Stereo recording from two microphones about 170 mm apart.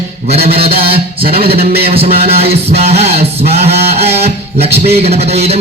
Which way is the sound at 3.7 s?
70° right (ahead or behind).